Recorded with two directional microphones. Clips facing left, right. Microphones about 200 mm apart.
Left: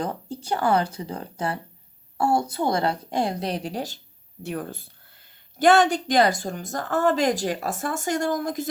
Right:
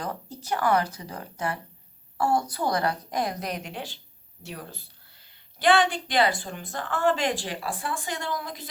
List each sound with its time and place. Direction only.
0.0 s a woman's voice: 25° left (ahead or behind)
4.4 s speech: 50° left (ahead or behind)